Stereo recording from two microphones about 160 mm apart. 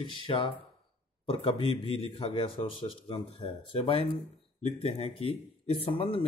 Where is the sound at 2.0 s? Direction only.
35° left (ahead or behind).